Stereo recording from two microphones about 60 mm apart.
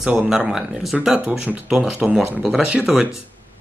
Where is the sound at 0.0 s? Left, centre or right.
Right.